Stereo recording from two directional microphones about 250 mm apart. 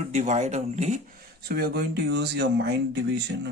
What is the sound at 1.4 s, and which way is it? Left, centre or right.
Speech, right.